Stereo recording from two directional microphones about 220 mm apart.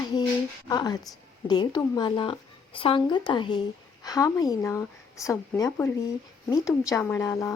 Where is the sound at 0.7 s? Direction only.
20° left (ahead or behind).